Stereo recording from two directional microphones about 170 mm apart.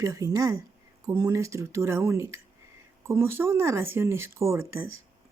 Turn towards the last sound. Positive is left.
turn(degrees=-15)  # may be behind; listen again after turning